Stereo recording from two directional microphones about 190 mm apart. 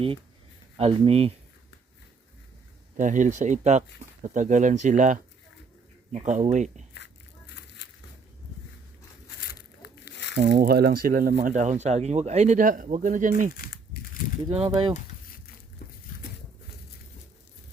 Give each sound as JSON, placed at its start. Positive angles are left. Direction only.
{"t": 0.8, "sound": "speech", "side_deg": -30}
{"t": 3.0, "sound": "speech", "side_deg": -40}
{"t": 9.5, "sound": "crumpling", "side_deg": 60}
{"t": 10.5, "sound": "speech", "side_deg": -55}
{"t": 13.5, "sound": "crumpling", "side_deg": 50}
{"t": 14.5, "sound": "speech", "side_deg": -30}
{"t": 15.8, "sound": "a sound", "side_deg": 50}